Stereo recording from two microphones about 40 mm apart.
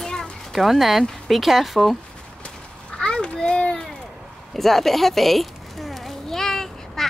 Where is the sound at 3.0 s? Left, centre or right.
Centre.